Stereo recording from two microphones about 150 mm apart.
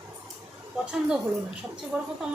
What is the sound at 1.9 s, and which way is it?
Speech, 5° right (ahead or behind).